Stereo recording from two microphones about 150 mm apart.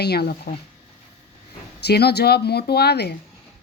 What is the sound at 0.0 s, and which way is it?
Speech, 90° left.